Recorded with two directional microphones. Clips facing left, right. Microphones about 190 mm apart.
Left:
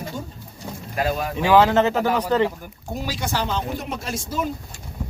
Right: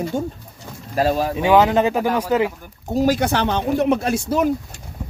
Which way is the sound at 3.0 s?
50° right (ahead or behind).